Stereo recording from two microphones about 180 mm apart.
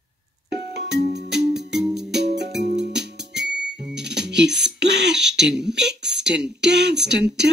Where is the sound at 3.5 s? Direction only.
70° right (ahead or behind).